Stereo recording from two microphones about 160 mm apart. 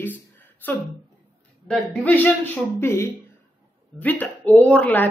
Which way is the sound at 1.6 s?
5° left (ahead or behind).